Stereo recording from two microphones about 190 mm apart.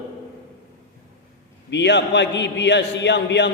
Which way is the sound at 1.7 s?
65° left (ahead or behind).